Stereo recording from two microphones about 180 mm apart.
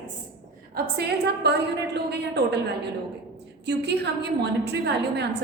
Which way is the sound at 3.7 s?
65° right (ahead or behind).